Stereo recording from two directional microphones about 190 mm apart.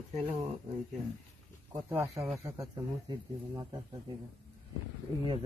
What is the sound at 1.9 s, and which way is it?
Speech, 5° right (ahead or behind).